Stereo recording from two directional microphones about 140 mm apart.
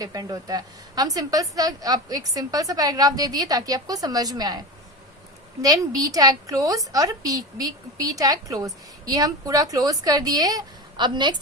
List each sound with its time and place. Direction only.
0.0 s a woman's voice: 25° right (ahead or behind)
5.6 s a woman's voice: 25° right (ahead or behind)